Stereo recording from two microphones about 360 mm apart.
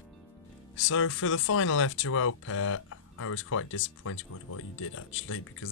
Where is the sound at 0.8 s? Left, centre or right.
Left.